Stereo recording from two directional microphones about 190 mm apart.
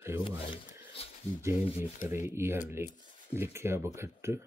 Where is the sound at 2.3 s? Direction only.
10° right (ahead or behind).